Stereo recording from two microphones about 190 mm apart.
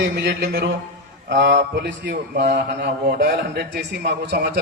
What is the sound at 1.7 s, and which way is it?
A man's voice, 65° right (ahead or behind).